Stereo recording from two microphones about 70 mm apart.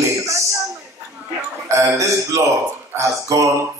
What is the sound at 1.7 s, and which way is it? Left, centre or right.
A man's voice, right.